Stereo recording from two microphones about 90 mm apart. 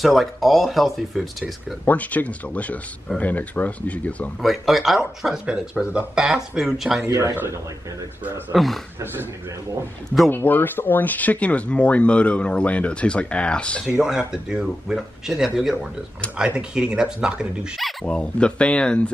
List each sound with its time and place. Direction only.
0.0 s speech: centre (ahead or behind)
1.9 s speech: 15° left (ahead or behind)
4.4 s speech: centre (ahead or behind)
7.1 s speech: 35° right (ahead or behind)
8.2 s speech: 20° right (ahead or behind)
8.5 s speech: centre (ahead or behind)
10.3 s speech: 20° left (ahead or behind)
13.8 s speech: 10° right (ahead or behind); by 19.1 s 10° left (ahead or behind)